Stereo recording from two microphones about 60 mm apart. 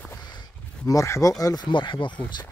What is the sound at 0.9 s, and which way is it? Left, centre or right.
Speech, left.